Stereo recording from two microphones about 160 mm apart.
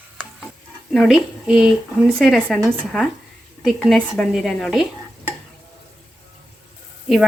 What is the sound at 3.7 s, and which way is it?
Speech, centre (ahead or behind).